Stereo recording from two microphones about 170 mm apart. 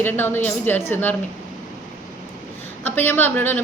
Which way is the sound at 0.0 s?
10° left (ahead or behind).